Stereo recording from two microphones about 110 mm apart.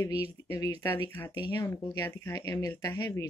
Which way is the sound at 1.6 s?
25° left (ahead or behind).